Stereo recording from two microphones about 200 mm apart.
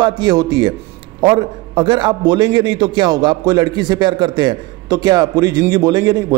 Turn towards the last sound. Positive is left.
turn(degrees=-20)  # may be behind; listen again after turning